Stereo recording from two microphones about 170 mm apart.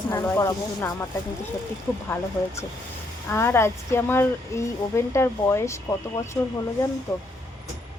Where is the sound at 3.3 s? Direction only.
15° left (ahead or behind).